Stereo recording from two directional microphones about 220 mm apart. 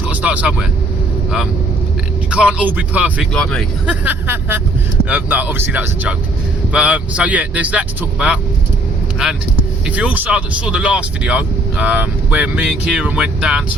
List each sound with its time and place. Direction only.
0.0 s speech: 5° right (ahead or behind)
2.3 s speech: 5° right (ahead or behind)
9.8 s speech: 5° right (ahead or behind)